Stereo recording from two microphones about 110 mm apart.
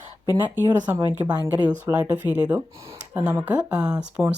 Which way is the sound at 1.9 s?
15° right (ahead or behind).